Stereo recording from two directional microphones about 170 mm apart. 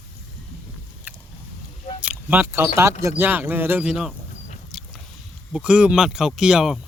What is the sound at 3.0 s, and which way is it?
Speech, 10° right (ahead or behind).